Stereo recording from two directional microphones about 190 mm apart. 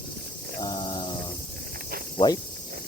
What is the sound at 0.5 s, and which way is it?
Mantra, 20° left (ahead or behind).